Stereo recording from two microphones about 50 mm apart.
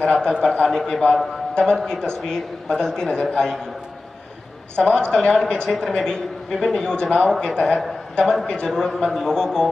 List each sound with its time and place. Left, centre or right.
0.0 s a man's voice: centre
4.7 s a man's voice: centre